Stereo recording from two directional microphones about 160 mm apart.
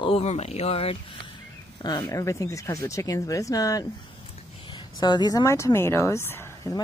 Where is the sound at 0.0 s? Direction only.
40° left (ahead or behind).